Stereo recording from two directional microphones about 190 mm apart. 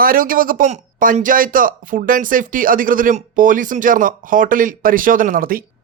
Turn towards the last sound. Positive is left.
turn(degrees=-50)  # may be behind; listen again after turning